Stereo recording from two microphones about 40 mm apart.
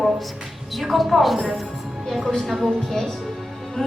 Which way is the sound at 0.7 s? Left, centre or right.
Centre.